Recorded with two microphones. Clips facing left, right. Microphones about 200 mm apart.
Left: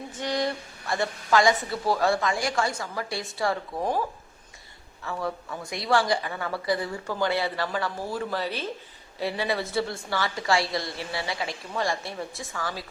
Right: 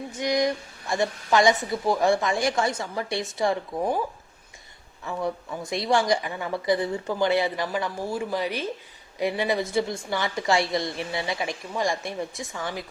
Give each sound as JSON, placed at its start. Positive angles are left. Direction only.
{"t": 0.2, "sound": "a woman's voice", "side_deg": -15}
{"t": 5.0, "sound": "a woman's voice", "side_deg": -20}